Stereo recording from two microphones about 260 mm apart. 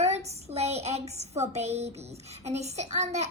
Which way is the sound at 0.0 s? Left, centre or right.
Right.